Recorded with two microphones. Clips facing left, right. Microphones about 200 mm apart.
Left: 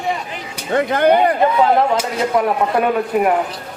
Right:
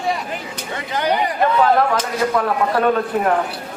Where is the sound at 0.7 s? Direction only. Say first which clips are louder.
Left 8 dB; 55° left (ahead or behind).